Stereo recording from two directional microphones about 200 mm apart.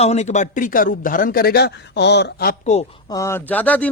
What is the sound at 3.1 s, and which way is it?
Speech, 15° left (ahead or behind).